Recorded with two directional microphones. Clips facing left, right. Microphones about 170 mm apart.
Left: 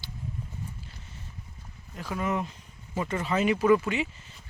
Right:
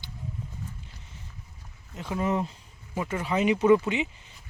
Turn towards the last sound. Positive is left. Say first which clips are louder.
# right 2 dB
turn(degrees=-20)  # may be behind; listen again after turning